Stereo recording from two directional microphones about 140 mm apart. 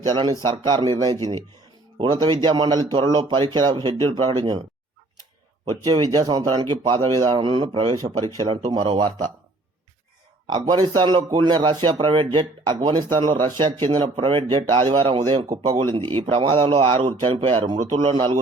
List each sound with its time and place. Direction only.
0.1 s speech: 30° right (ahead or behind)
5.9 s speech: 30° right (ahead or behind)
10.4 s speech: 30° right (ahead or behind)